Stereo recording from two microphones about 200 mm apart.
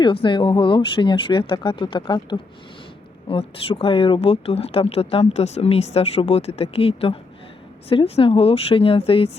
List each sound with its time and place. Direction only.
0.0 s speech: 25° left (ahead or behind)